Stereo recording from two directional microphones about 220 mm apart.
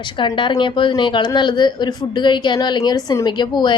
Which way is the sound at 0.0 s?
20° left (ahead or behind).